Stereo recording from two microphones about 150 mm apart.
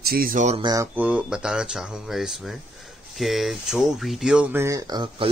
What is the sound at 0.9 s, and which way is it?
Speech, 10° right (ahead or behind).